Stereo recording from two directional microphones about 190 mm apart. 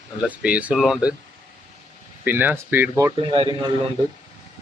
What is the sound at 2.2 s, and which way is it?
Speech, 10° right (ahead or behind).